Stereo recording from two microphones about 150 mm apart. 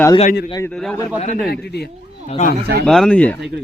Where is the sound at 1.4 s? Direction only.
90° left.